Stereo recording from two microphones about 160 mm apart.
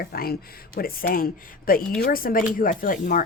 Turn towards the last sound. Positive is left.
turn(degrees=60)  # may be behind; listen again after turning